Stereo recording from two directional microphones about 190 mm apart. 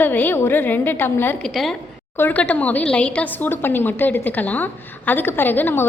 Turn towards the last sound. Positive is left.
turn(degrees=10)  # may be behind; listen again after turning